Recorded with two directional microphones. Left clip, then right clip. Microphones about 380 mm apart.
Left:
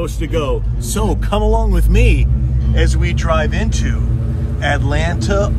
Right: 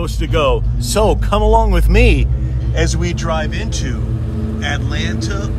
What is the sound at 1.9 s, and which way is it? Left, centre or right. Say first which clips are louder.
Speech: right 3 dB; right.